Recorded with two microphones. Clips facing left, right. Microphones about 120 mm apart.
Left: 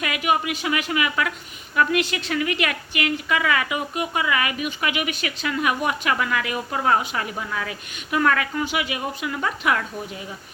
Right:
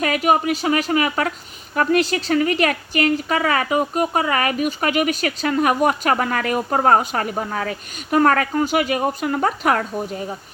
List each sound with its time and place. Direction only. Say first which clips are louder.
0.0 s speech: right 5 dB; 40° right (ahead or behind)